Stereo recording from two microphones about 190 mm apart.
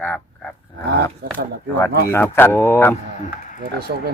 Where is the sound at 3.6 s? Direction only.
55° right (ahead or behind).